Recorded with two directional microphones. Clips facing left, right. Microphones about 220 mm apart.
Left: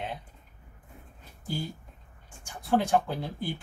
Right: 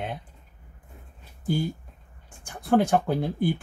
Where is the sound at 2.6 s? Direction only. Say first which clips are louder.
Right 4 dB; 55° right (ahead or behind).